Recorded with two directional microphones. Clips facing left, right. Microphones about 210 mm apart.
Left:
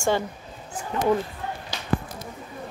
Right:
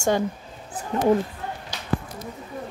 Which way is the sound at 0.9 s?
45° right (ahead or behind).